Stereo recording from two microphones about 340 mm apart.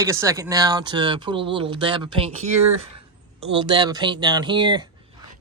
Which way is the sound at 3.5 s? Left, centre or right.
Centre.